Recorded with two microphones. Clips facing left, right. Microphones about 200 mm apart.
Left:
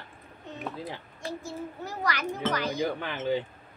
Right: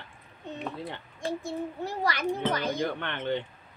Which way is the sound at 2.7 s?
5° left (ahead or behind).